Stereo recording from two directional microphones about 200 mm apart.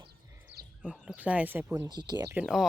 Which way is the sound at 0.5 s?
60° right (ahead or behind).